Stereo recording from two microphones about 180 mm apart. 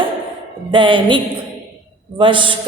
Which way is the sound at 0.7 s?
25° right (ahead or behind).